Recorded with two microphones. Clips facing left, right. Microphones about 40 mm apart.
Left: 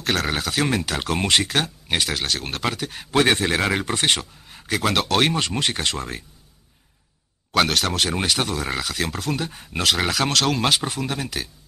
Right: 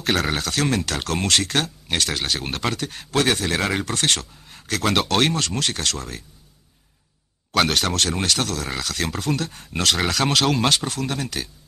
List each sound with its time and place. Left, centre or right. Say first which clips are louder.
0.0 s speech: right 1 dB; centre
2.1 s speech: even; centre
3.5 s speech: left 1 dB; centre
3.8 s speech: left 1 dB; centre
5.3 s speech: left 1 dB; centre
7.5 s speech: even; centre
10.8 s speech: even; centre